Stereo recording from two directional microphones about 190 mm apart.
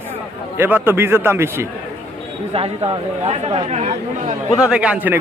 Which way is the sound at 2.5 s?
30° right (ahead or behind).